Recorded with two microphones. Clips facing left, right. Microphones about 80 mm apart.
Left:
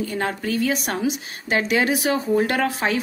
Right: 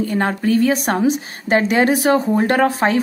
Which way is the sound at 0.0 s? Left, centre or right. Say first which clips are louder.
Right 6 dB; right.